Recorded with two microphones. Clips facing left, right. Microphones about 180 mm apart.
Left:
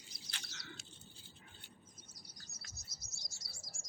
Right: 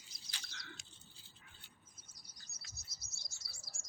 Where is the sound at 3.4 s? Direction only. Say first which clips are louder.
Left 3 dB; 25° left (ahead or behind).